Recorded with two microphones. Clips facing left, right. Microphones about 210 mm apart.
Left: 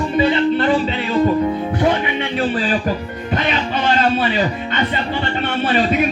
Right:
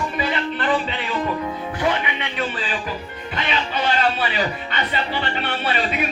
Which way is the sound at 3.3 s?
45° left (ahead or behind).